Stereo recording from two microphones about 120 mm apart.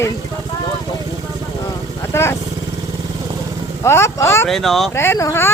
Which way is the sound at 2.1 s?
20° left (ahead or behind).